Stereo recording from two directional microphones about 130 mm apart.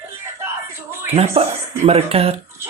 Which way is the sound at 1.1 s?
50° right (ahead or behind).